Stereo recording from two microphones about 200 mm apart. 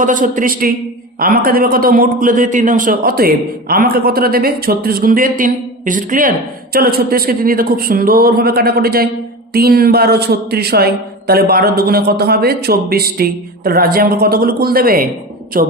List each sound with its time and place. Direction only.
0.0 s a man's voice: 40° right (ahead or behind)